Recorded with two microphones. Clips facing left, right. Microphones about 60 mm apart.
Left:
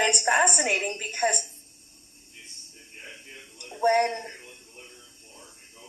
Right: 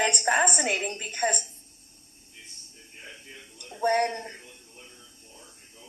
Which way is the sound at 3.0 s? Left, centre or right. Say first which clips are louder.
Left 1 dB; centre.